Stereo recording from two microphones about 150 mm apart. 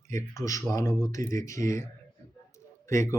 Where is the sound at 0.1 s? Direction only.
20° left (ahead or behind).